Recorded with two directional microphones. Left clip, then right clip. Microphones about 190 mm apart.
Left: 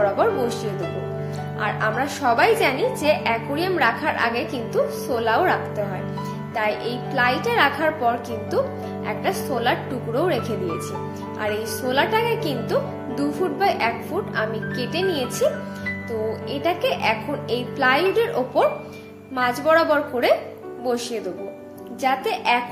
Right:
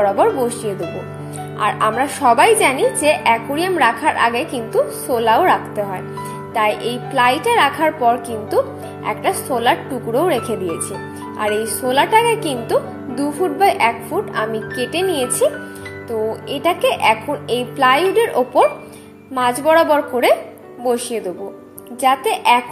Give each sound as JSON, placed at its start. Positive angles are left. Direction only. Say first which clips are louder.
{"t": 0.0, "sound": "a woman's voice", "louder": "right 5 dB", "side_deg": -20}
{"t": 1.6, "sound": "a woman's voice", "louder": "right 6 dB", "side_deg": -25}